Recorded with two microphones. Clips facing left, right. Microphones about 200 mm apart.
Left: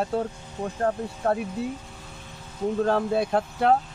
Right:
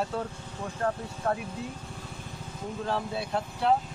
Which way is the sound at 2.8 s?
50° left (ahead or behind).